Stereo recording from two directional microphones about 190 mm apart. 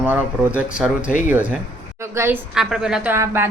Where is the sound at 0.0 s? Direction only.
10° right (ahead or behind).